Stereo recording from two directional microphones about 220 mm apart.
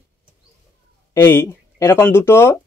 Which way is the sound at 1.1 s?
10° left (ahead or behind).